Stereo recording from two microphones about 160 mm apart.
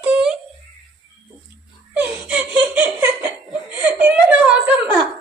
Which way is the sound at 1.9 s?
10° right (ahead or behind).